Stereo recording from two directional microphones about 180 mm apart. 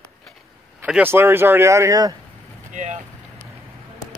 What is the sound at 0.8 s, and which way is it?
Speech, 10° right (ahead or behind).